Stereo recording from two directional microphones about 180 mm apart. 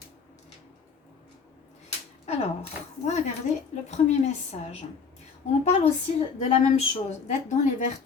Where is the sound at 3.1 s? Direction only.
40° left (ahead or behind).